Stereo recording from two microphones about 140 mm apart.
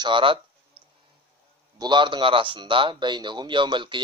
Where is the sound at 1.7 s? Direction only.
30° right (ahead or behind).